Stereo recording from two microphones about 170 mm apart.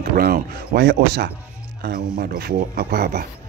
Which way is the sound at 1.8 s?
65° right (ahead or behind).